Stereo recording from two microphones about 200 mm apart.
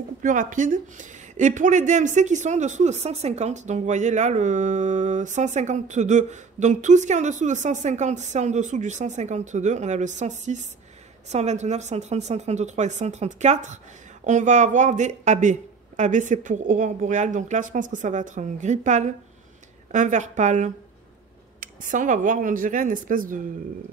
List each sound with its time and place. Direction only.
0.2 s speech: 40° right (ahead or behind)